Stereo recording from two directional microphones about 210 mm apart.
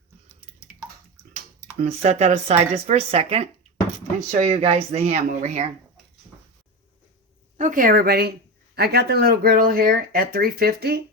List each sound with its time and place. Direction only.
1.8 s speech: 30° right (ahead or behind)
7.5 s speech: 40° right (ahead or behind)